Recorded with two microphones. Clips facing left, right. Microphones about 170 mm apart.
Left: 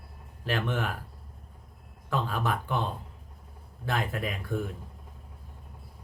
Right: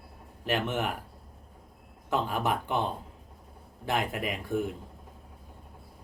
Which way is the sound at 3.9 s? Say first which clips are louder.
Right 1 dB; 20° right (ahead or behind).